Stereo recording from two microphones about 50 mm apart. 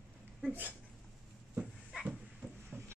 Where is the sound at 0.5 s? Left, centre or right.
Right.